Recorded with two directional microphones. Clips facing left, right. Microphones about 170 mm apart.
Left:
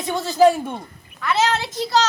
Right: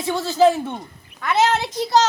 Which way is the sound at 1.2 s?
15° right (ahead or behind).